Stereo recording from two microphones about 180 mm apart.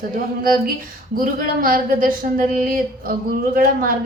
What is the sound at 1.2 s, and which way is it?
Speech, 50° right (ahead or behind).